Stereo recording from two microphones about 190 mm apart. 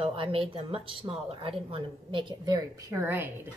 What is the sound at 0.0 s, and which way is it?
A woman's voice, 30° right (ahead or behind).